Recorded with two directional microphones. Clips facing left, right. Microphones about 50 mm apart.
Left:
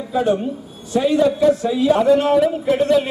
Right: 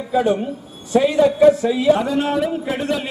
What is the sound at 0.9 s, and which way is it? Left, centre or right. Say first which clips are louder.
Speech: right 2 dB; right.